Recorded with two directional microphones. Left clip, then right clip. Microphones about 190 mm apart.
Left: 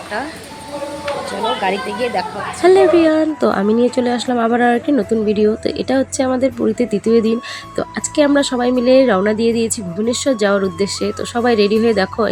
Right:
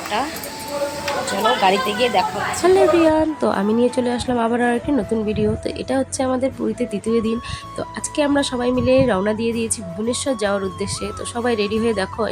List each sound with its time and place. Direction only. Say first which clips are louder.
1.6 s a woman's voice: right 2 dB; 10° left (ahead or behind)